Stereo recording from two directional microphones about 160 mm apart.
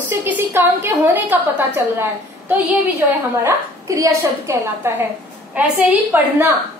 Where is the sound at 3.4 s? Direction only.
20° right (ahead or behind).